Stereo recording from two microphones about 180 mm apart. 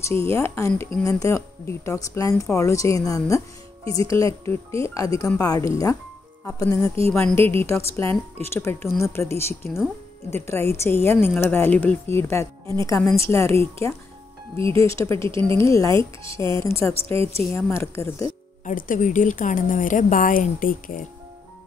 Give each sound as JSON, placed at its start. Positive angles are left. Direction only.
{"t": 0.0, "sound": "speech", "side_deg": 15}
{"t": 3.8, "sound": "speech", "side_deg": -30}
{"t": 4.1, "sound": "speech", "side_deg": 15}
{"t": 14.6, "sound": "speech", "side_deg": -30}
{"t": 14.9, "sound": "speech", "side_deg": 15}
{"t": 15.2, "sound": "speech", "side_deg": -30}
{"t": 15.5, "sound": "speech", "side_deg": 15}
{"t": 18.7, "sound": "a woman's voice", "side_deg": 45}